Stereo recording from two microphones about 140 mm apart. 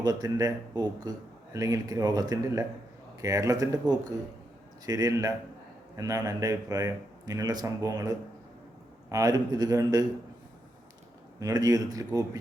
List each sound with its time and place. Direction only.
0.0 s a man's voice: 25° right (ahead or behind)
11.3 s a man's voice: 25° right (ahead or behind)